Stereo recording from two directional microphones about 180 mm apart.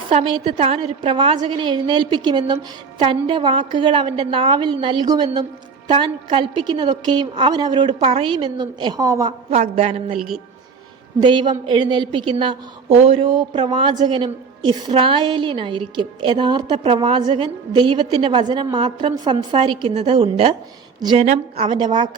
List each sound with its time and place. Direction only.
0.1 s a woman's voice: 30° right (ahead or behind)
9.5 s speech: 35° right (ahead or behind)
11.2 s a woman's voice: 25° right (ahead or behind)